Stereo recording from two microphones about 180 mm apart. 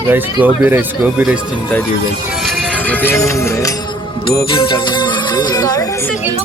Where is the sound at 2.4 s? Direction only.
5° left (ahead or behind); by 6.0 s 20° left (ahead or behind).